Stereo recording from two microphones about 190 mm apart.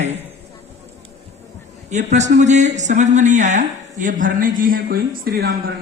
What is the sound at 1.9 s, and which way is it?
A man's voice, 35° right (ahead or behind).